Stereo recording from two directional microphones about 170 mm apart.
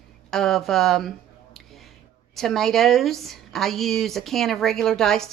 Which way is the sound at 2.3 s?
Centre (ahead or behind).